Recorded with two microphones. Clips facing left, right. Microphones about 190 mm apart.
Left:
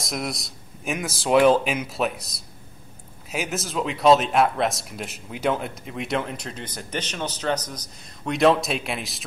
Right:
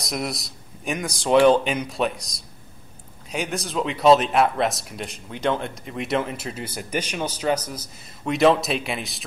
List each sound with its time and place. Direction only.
0.0 s speech: centre (ahead or behind)